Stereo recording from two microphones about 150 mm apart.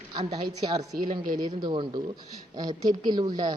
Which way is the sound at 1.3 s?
25° right (ahead or behind).